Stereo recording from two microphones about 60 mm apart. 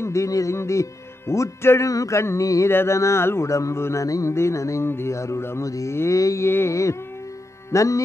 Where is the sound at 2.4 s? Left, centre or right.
Left.